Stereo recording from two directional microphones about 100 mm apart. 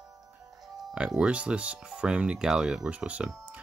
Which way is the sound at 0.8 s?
5° right (ahead or behind).